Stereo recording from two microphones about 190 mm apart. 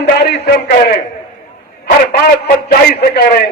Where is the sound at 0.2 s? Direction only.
60° left (ahead or behind).